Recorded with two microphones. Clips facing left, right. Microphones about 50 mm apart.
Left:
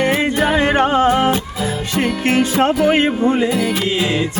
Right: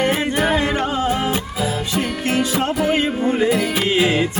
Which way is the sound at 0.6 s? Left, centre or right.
Left.